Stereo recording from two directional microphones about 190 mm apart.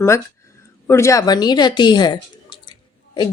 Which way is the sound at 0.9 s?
15° left (ahead or behind).